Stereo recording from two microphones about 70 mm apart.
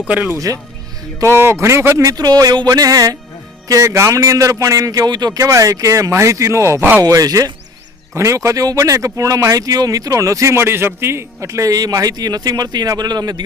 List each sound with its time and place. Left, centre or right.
0.3 s speech: right
1.4 s speech: right
2.0 s speech: right
3.7 s speech: right
5.4 s speech: right
7.0 s speech: right
8.1 s speech: right